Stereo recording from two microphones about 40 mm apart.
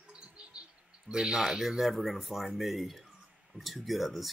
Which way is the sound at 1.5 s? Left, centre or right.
Centre.